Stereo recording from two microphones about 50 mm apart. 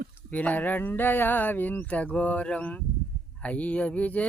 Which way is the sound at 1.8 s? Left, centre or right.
Left.